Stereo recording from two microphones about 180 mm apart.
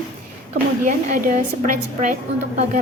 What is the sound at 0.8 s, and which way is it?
Speech, 50° right (ahead or behind).